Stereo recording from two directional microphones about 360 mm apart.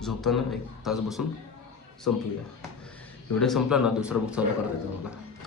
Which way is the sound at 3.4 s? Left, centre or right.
Centre.